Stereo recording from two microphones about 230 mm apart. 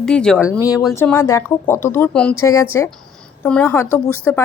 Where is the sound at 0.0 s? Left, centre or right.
Centre.